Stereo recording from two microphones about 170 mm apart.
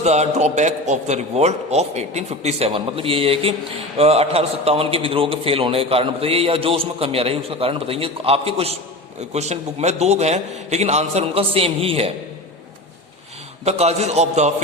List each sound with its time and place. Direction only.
0.0 s a man's voice: 40° right (ahead or behind)
13.7 s a man's voice: 40° right (ahead or behind)